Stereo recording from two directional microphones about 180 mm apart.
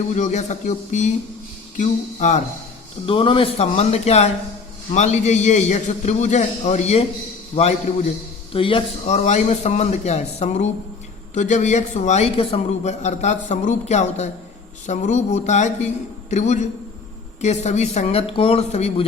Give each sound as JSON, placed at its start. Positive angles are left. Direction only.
{"t": 0.1, "sound": "speech", "side_deg": 40}
{"t": 3.1, "sound": "speech", "side_deg": 30}